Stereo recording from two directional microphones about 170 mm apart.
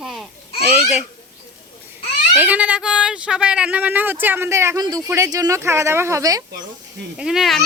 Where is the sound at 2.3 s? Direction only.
10° right (ahead or behind).